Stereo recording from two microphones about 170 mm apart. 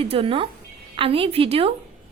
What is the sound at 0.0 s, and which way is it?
A woman's voice, 35° right (ahead or behind).